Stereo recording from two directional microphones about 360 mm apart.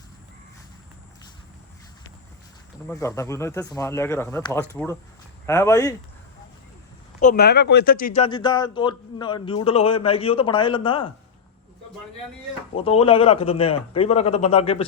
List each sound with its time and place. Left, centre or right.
2.8 s speech: centre
7.2 s speech: left
12.7 s speech: centre